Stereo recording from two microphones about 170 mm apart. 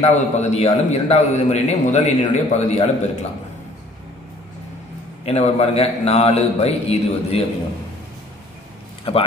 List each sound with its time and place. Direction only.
0.0 s a man's voice: 40° left (ahead or behind)
5.2 s a man's voice: 40° left (ahead or behind)